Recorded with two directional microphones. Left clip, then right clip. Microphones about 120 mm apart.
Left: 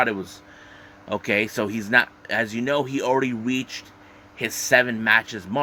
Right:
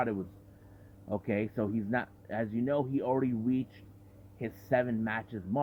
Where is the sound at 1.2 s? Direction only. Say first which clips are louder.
Left 11 dB; 5° left (ahead or behind).